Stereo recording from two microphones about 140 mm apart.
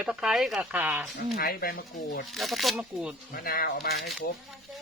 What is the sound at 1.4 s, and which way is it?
Speech, 90° left.